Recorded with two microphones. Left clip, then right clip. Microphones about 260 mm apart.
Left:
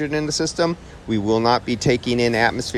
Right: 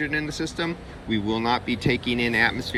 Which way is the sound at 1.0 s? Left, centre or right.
Right.